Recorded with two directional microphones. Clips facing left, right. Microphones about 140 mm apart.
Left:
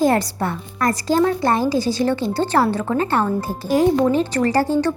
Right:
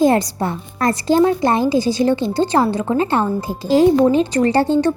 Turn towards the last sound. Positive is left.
turn(degrees=-25)  # may be behind; listen again after turning